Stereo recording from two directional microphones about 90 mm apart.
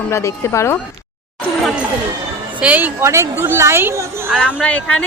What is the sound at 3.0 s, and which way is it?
Speech, 30° right (ahead or behind).